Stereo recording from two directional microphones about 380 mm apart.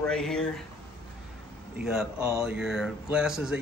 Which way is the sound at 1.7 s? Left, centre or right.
Centre.